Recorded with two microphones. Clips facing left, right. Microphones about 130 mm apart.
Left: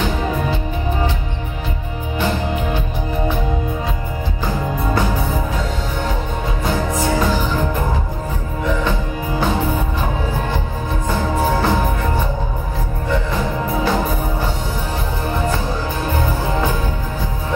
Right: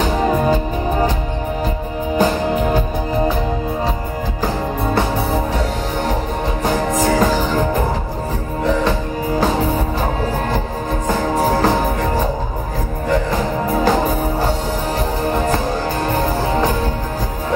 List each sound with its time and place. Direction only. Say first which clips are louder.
2.1 s music: right 4 dB; 40° right (ahead or behind)
7.0 s music: right 4 dB; 40° right (ahead or behind)
11.1 s music: right 2 dB; 40° right (ahead or behind)